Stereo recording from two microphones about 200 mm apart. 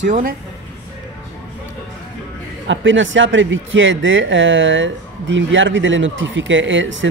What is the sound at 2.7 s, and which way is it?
Speech, 70° right (ahead or behind).